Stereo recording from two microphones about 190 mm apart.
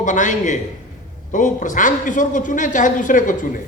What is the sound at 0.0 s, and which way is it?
A man's voice, 40° left (ahead or behind).